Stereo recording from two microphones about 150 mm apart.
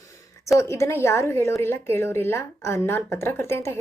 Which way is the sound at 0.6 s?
20° left (ahead or behind).